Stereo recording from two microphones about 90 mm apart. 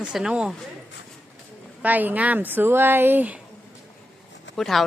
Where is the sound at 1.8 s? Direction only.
20° right (ahead or behind).